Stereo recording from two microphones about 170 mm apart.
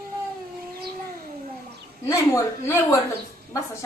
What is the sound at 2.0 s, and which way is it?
Speech, 15° left (ahead or behind).